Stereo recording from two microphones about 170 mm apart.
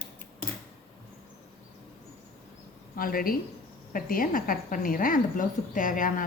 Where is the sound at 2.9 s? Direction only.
55° left (ahead or behind).